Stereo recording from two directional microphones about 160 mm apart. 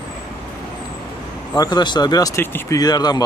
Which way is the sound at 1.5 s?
25° left (ahead or behind).